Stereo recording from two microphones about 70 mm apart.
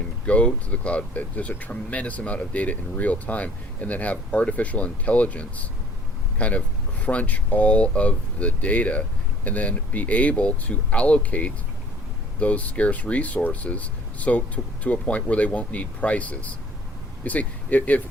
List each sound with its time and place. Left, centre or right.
0.3 s speech: centre